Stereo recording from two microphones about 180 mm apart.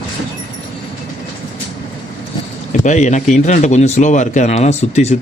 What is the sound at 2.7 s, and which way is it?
Speech, 40° left (ahead or behind).